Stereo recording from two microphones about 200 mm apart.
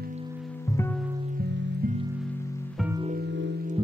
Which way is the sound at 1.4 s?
50° right (ahead or behind).